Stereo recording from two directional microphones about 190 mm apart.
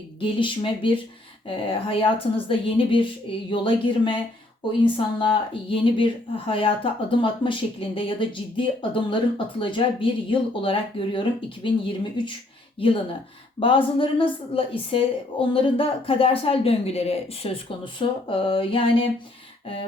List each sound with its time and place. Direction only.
0.2 s speech: 25° left (ahead or behind)